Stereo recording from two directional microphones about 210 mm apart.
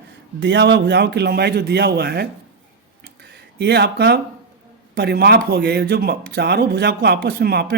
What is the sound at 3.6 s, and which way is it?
Speech, 50° right (ahead or behind).